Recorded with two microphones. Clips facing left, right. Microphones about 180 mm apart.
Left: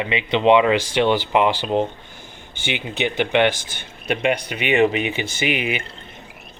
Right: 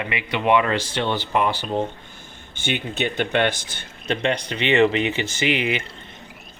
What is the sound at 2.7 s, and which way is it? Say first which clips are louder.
Speech: left 1 dB; 5° left (ahead or behind).